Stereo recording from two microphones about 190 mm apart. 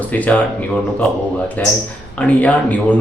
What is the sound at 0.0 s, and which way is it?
Speech, 10° left (ahead or behind).